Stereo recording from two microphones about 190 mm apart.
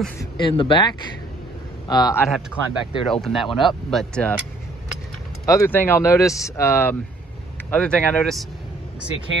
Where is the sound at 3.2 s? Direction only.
Centre (ahead or behind).